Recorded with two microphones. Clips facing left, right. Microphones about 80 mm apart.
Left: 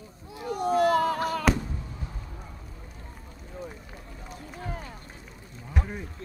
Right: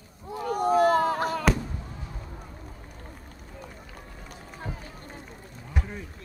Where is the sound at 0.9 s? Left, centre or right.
Right.